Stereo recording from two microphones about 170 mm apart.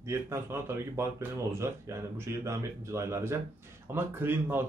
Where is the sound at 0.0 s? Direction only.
15° right (ahead or behind).